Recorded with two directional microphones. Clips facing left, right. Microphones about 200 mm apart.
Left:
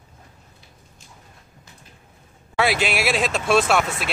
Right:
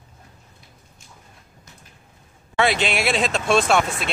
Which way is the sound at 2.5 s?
5° left (ahead or behind).